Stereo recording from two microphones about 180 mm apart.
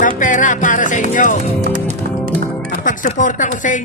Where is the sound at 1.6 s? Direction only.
40° right (ahead or behind).